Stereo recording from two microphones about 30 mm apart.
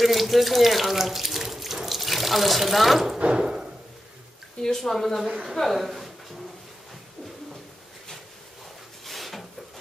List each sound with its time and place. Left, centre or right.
0.0 s speech: centre
3.3 s a sound: right
4.6 s speech: centre
5.2 s a woman's voice: centre
5.6 s a woman's voice: centre
9.0 s a sound: centre